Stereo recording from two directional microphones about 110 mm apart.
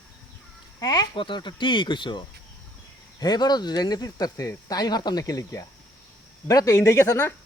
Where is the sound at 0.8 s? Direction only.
35° left (ahead or behind).